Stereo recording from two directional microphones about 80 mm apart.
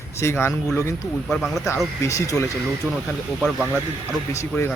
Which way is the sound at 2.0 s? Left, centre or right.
Left.